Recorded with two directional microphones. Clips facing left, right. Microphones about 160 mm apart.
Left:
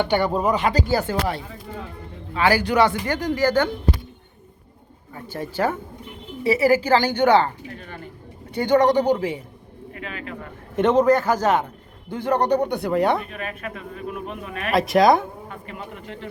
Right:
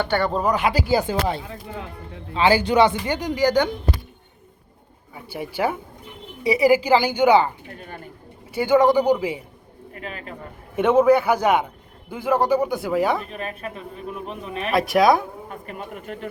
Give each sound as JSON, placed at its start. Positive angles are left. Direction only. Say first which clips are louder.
{"t": 0.0, "sound": "speech", "louder": "left 1 dB", "side_deg": 15}
{"t": 0.5, "sound": "a woman's voice", "louder": "right 1 dB", "side_deg": -10}
{"t": 5.1, "sound": "a woman's voice", "louder": "left 1 dB", "side_deg": -10}
{"t": 8.5, "sound": "a woman's voice", "louder": "right 1 dB", "side_deg": -5}
{"t": 10.0, "sound": "speech", "louder": "left 1 dB", "side_deg": -40}
{"t": 10.8, "sound": "a woman's voice", "louder": "right 1 dB", "side_deg": -10}
{"t": 13.3, "sound": "speech", "louder": "right 1 dB", "side_deg": -30}
{"t": 14.7, "sound": "speech", "louder": "left 1 dB", "side_deg": 0}
{"t": 15.4, "sound": "a man's voice", "louder": "right 1 dB", "side_deg": -45}